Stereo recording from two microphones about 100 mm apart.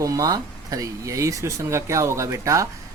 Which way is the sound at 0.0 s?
35° right (ahead or behind).